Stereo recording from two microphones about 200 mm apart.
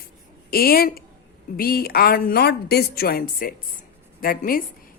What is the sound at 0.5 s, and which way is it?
A woman's voice, 50° left (ahead or behind).